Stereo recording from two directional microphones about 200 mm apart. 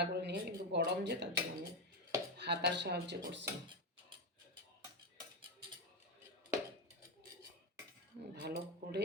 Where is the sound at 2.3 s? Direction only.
60° right (ahead or behind).